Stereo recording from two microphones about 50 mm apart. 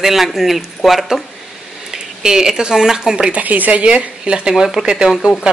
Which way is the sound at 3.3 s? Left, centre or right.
Right.